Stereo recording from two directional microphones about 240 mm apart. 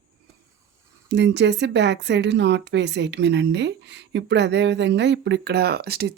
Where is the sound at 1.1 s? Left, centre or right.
Right.